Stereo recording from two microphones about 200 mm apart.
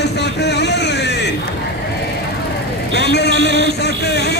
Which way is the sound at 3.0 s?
55° left (ahead or behind).